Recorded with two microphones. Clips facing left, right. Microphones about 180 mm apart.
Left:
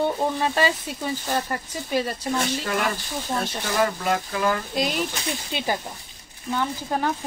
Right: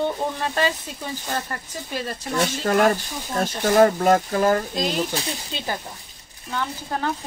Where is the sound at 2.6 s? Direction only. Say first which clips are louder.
Right 7 dB; 45° right (ahead or behind).